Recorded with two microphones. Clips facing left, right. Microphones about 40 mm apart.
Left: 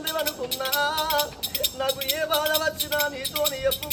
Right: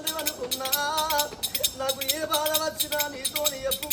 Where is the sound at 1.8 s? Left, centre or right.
Centre.